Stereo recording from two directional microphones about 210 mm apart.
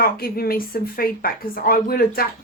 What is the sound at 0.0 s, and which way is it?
A woman's voice, 45° left (ahead or behind).